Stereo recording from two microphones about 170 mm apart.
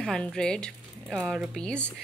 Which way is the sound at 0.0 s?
5° left (ahead or behind).